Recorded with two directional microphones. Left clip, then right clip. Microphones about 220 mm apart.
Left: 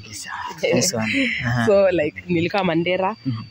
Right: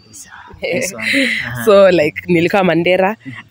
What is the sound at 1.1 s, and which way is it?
Speech, 45° right (ahead or behind).